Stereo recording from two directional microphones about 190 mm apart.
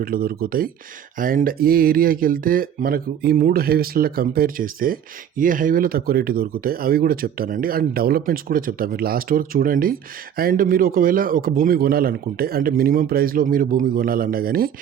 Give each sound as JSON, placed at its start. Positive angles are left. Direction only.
{"t": 0.0, "sound": "speech", "side_deg": -50}